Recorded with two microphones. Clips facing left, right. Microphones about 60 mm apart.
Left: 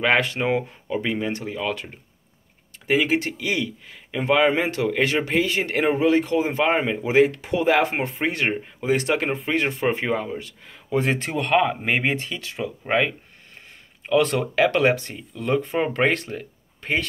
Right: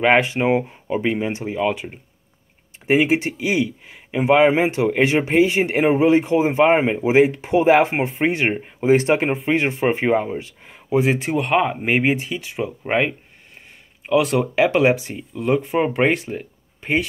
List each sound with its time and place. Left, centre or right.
0.0 s speech: right
2.9 s speech: right
11.0 s speech: centre